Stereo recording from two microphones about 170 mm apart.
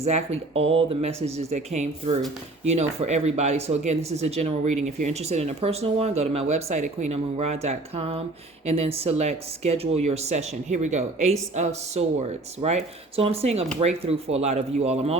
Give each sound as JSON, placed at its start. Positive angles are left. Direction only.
{"t": 0.0, "sound": "speech", "side_deg": -35}